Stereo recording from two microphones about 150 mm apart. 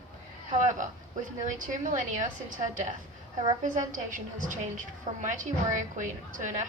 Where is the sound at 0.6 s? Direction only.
60° right (ahead or behind).